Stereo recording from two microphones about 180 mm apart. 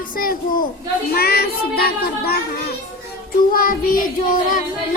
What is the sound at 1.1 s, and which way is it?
A child's voice, 60° left (ahead or behind).